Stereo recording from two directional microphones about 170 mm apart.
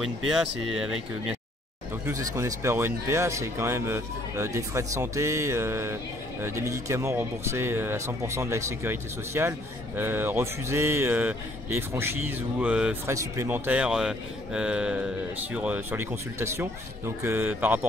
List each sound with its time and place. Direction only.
0.0 s speech: 5° right (ahead or behind)
2.0 s speech: 15° right (ahead or behind)